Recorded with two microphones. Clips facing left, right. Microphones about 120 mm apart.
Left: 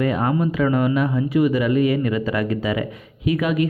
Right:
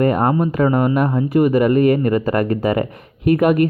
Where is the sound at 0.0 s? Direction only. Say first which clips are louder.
Right 4 dB; 50° right (ahead or behind).